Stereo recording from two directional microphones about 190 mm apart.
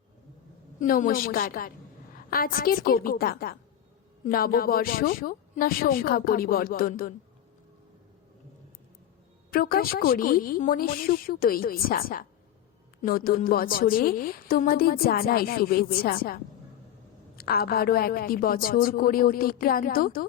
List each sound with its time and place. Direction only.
0.8 s a woman's voice: 45° left (ahead or behind)
9.5 s a woman's voice: 50° left (ahead or behind)